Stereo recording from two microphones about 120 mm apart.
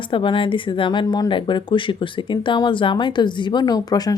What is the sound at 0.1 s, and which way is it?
Speech, 45° left (ahead or behind).